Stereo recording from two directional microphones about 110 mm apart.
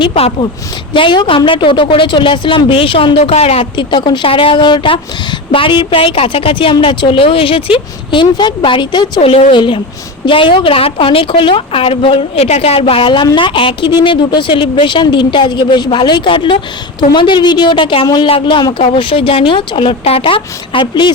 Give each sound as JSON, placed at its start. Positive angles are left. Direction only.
{"t": 0.1, "sound": "a woman's voice", "side_deg": 90}
{"t": 0.9, "sound": "speech", "side_deg": 50}
{"t": 3.8, "sound": "speech", "side_deg": 45}
{"t": 9.2, "sound": "a woman's voice", "side_deg": 65}
{"t": 9.6, "sound": "a woman's voice", "side_deg": 50}